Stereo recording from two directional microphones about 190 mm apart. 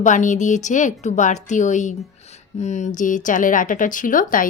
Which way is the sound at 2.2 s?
35° left (ahead or behind).